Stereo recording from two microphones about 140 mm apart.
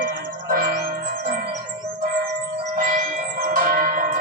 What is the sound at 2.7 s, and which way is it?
Church bell, 65° right (ahead or behind).